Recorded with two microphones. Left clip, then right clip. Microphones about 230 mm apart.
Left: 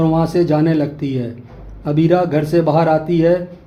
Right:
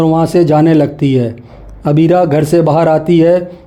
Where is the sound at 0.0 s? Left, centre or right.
Right.